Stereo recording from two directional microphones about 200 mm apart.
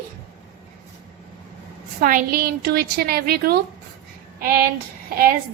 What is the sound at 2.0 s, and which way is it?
A woman's voice, 45° right (ahead or behind).